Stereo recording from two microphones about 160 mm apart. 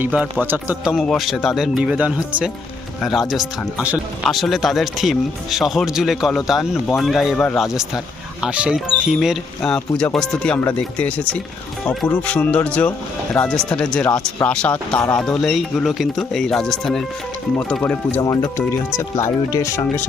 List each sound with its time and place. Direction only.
0.0 s speech: 10° right (ahead or behind)
0.9 s speech: centre (ahead or behind)
18.2 s speech: 20° left (ahead or behind)